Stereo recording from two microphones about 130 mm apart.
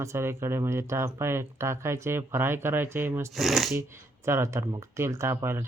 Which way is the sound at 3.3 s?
Centre (ahead or behind).